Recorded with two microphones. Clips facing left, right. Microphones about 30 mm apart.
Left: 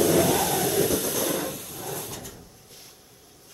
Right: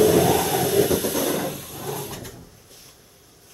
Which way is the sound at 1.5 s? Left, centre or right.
Centre.